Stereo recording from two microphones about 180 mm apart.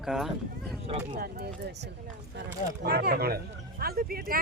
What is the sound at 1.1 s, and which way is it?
Speech, 60° right (ahead or behind).